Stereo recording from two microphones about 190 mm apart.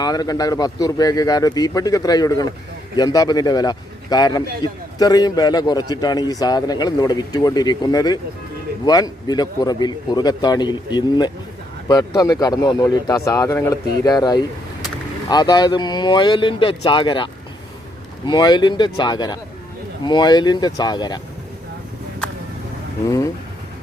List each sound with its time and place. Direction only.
0.0 s a man's voice: 20° left (ahead or behind)
18.3 s a man's voice: 20° left (ahead or behind)
23.0 s speech: 15° left (ahead or behind)